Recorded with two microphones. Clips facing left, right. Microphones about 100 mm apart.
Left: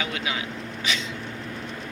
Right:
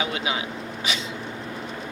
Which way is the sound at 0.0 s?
20° right (ahead or behind).